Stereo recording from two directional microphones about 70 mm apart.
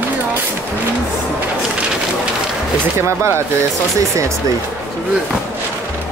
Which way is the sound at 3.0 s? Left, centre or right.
Right.